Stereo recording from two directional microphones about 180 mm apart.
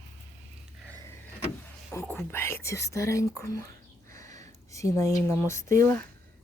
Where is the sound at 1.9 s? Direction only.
15° left (ahead or behind).